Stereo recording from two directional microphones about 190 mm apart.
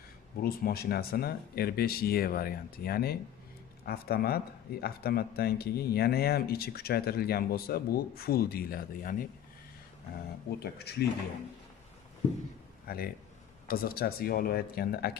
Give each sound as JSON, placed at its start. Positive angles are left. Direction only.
{"t": 0.4, "sound": "speech", "side_deg": 50}
{"t": 10.6, "sound": "speech", "side_deg": 60}
{"t": 12.8, "sound": "speech", "side_deg": 50}